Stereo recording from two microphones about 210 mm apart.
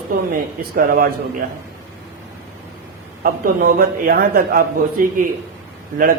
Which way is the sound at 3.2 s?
45° right (ahead or behind).